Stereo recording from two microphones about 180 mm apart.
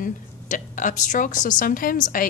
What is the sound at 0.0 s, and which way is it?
Speech, 45° left (ahead or behind).